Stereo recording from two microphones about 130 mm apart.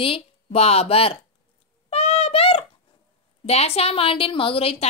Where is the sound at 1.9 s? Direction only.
50° left (ahead or behind).